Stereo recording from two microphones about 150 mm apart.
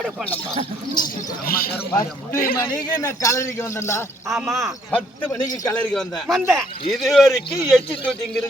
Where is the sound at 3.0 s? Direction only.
20° left (ahead or behind).